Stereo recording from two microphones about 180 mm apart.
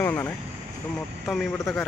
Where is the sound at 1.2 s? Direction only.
Centre (ahead or behind).